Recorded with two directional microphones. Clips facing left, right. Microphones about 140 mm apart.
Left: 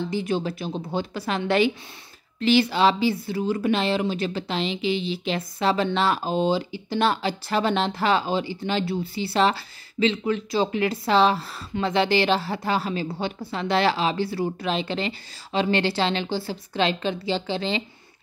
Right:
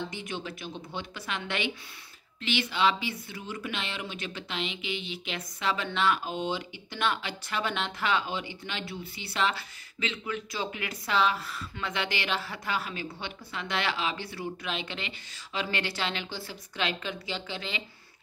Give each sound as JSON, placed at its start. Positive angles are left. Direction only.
{"t": 0.0, "sound": "speech", "side_deg": 35}